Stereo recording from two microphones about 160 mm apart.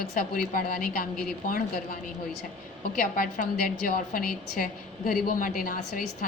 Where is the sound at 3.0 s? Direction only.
60° left (ahead or behind).